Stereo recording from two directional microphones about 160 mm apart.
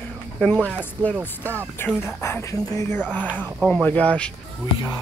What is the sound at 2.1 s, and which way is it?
Speech, 20° left (ahead or behind).